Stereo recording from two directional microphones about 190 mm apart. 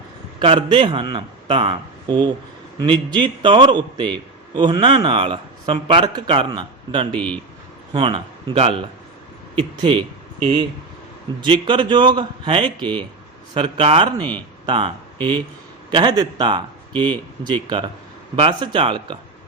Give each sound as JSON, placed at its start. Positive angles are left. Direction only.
{"t": 0.3, "sound": "a man's voice", "side_deg": -25}
{"t": 7.1, "sound": "a man's voice", "side_deg": 5}
{"t": 7.9, "sound": "a man's voice", "side_deg": -25}